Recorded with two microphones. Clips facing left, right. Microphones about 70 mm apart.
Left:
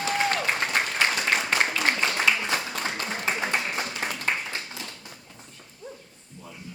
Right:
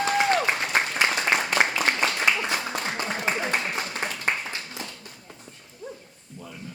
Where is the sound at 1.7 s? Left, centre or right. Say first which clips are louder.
Right 1 dB; right.